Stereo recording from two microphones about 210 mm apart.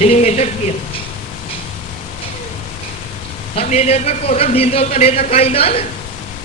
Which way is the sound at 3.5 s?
30° left (ahead or behind).